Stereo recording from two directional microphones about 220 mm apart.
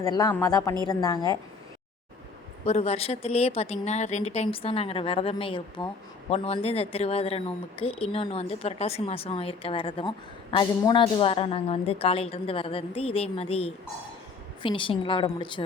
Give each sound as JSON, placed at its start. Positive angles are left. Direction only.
{"t": 0.0, "sound": "speech", "side_deg": 15}
{"t": 2.6, "sound": "a woman's voice", "side_deg": 30}